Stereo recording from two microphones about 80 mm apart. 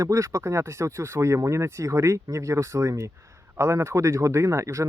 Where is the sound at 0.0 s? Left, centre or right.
Right.